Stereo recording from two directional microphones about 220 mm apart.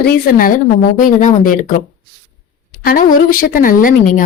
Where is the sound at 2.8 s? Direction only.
40° left (ahead or behind).